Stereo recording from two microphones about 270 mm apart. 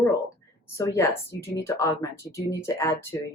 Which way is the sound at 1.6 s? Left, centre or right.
Centre.